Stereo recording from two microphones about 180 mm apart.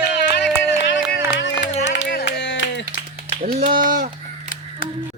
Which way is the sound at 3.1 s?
55° right (ahead or behind).